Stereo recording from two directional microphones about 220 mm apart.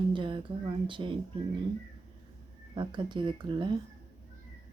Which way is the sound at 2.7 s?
20° right (ahead or behind).